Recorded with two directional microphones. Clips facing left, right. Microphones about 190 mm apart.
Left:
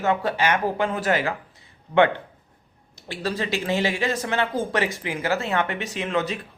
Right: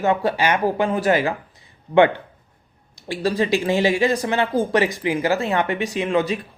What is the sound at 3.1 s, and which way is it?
Speech, 15° right (ahead or behind).